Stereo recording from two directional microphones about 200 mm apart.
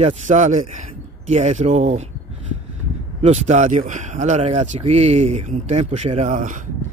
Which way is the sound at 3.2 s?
35° right (ahead or behind).